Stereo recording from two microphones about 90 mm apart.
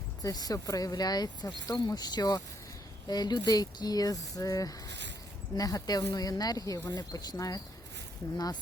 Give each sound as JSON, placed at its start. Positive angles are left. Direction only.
{"t": 0.2, "sound": "speech", "side_deg": 45}